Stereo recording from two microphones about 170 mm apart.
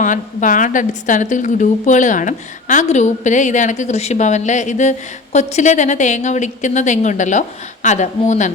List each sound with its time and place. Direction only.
0.0 s a woman's voice: 50° left (ahead or behind)